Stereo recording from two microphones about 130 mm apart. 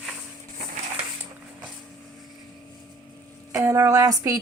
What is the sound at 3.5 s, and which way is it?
Speech, 25° right (ahead or behind).